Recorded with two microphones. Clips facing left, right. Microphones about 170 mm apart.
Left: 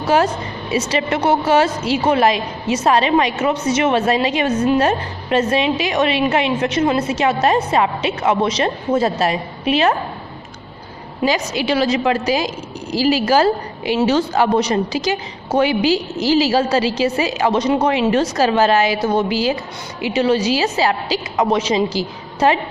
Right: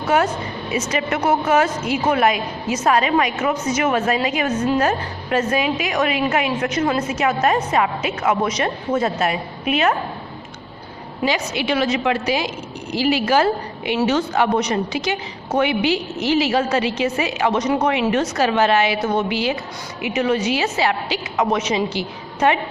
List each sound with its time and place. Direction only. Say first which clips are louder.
0.1 s a woman's voice: left 2 dB; 30° left (ahead or behind)
11.3 s a woman's voice: left 3 dB; 35° left (ahead or behind)